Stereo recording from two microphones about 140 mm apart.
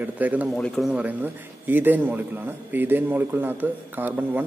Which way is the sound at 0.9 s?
15° right (ahead or behind).